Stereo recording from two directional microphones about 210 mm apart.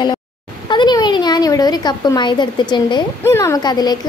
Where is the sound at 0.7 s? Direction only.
20° left (ahead or behind).